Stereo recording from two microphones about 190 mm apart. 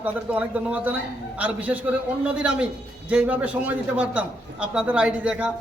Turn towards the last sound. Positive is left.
turn(degrees=-5)  # may be behind; listen again after turning